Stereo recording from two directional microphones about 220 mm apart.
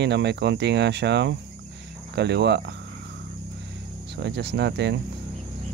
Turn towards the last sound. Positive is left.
turn(degrees=-50)  # may be behind; listen again after turning